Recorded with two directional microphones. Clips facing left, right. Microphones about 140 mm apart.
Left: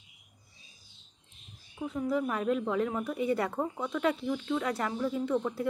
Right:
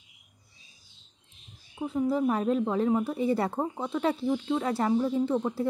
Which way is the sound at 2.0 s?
30° right (ahead or behind).